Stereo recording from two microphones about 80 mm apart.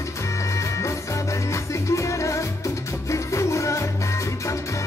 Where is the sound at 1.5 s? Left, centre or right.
Left.